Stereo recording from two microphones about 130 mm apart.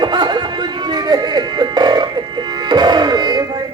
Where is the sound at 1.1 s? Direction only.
35° right (ahead or behind).